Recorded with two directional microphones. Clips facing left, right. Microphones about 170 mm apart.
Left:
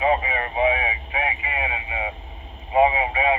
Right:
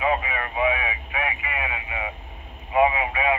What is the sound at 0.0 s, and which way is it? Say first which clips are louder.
Radio: left 3 dB; 35° left (ahead or behind).